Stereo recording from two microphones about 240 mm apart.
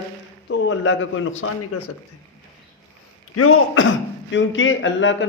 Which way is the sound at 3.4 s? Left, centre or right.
Left.